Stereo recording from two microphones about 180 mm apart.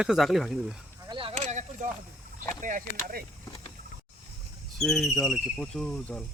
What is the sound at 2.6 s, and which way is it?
Speech, 45° right (ahead or behind).